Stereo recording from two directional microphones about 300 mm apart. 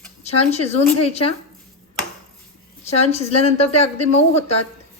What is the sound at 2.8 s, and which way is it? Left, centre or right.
Speech, left.